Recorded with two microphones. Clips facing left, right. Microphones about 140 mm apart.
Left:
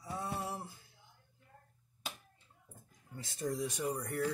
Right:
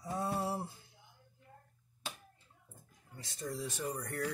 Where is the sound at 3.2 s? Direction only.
20° left (ahead or behind).